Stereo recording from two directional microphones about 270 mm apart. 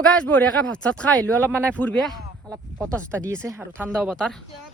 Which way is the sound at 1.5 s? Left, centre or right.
Centre.